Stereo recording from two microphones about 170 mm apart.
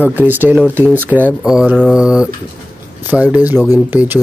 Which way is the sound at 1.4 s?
5° right (ahead or behind).